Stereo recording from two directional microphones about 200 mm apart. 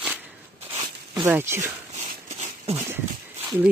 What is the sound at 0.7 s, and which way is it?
Zipper, 15° right (ahead or behind).